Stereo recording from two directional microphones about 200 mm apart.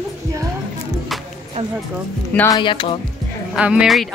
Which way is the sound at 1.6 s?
35° right (ahead or behind).